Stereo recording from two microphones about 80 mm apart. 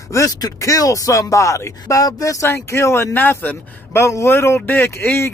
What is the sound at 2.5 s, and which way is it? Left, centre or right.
Speech, left.